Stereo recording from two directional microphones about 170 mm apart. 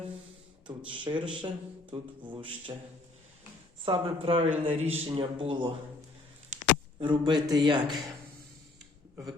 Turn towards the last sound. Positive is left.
turn(degrees=-25)  # may be behind; listen again after turning